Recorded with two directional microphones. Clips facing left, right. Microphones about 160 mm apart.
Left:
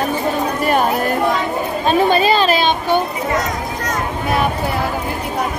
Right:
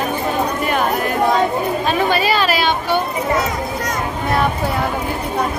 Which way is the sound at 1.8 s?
25° left (ahead or behind).